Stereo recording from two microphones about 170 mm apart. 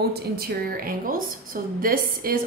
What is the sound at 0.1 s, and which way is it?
A woman's voice, 65° right (ahead or behind).